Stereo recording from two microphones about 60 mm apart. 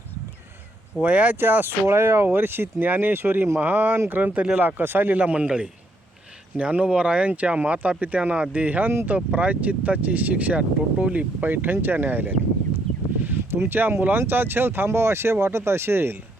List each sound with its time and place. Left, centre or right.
1.0 s speech: right
1.4 s speech: right
1.9 s speech: right
5.2 s speech: right
13.2 s a sound: right
14.0 s speech: right